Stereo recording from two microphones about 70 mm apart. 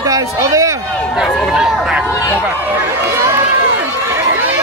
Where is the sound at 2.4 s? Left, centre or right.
Right.